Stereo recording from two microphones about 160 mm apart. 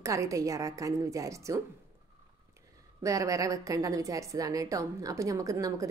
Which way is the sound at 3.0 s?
20° right (ahead or behind).